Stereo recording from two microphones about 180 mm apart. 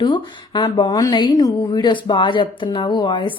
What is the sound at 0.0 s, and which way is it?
Speech, 25° left (ahead or behind).